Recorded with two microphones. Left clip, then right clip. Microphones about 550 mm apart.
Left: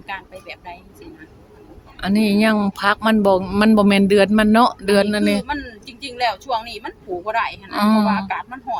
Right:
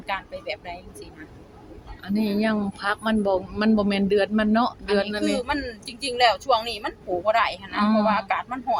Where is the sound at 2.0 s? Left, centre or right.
Left.